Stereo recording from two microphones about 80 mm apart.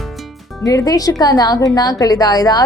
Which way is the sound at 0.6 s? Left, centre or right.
Left.